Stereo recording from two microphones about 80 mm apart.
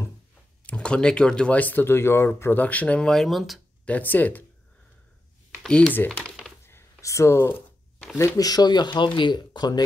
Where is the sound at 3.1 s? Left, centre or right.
Centre.